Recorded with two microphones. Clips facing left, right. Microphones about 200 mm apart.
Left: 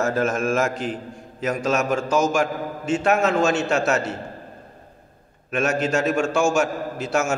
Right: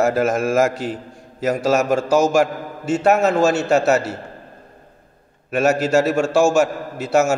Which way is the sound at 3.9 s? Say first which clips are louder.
Right 5 dB; 5° right (ahead or behind).